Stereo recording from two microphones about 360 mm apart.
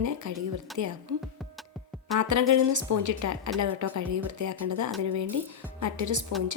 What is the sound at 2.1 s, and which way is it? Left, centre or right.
Speech, right.